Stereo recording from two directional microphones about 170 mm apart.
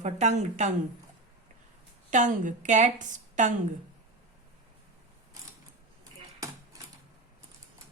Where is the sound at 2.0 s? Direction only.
45° right (ahead or behind).